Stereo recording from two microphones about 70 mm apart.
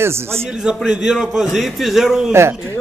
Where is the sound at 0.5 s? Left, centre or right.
Centre.